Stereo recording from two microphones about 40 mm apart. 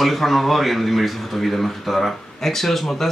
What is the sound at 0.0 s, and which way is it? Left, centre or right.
A man's voice, centre.